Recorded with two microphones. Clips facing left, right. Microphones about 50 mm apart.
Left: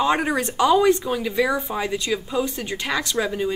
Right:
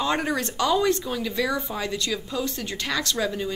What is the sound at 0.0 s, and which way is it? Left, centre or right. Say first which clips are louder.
A woman's voice: left 4 dB; centre.